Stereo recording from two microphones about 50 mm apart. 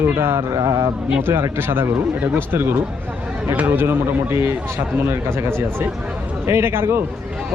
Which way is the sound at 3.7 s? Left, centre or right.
Right.